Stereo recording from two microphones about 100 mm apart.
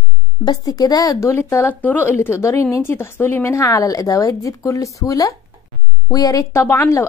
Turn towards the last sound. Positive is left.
turn(degrees=30)  # may be behind; listen again after turning